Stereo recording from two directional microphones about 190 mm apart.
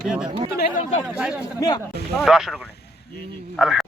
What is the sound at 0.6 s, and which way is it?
Speech, 40° left (ahead or behind).